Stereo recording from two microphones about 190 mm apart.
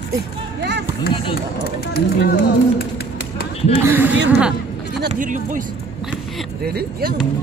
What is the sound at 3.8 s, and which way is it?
Speech, 10° right (ahead or behind).